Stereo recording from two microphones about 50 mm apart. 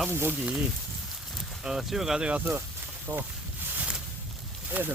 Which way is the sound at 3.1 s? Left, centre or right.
Right.